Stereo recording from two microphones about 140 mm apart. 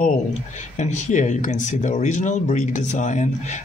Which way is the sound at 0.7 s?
60° left (ahead or behind).